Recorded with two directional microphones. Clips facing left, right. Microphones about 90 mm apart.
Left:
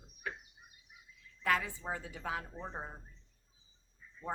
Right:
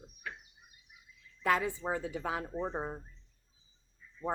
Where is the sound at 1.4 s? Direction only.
20° right (ahead or behind).